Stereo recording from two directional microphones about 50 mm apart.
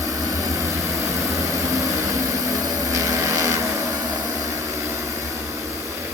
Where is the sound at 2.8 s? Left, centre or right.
Right.